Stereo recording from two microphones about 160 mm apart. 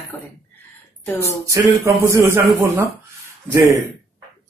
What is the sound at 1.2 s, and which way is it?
A man's voice, 20° right (ahead or behind).